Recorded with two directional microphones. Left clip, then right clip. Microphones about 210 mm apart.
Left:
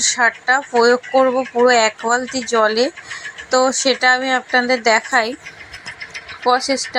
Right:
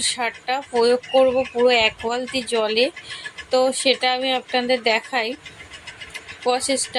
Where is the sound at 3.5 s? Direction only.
15° left (ahead or behind).